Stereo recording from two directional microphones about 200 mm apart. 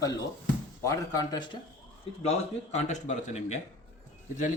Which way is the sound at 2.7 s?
35° left (ahead or behind).